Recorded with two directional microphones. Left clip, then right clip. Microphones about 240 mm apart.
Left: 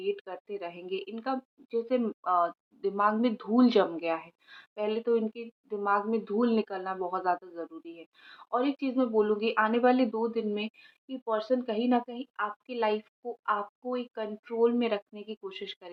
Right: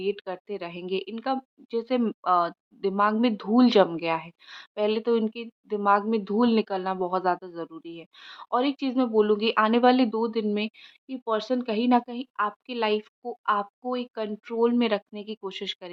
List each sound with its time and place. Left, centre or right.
0.0 s a woman's voice: right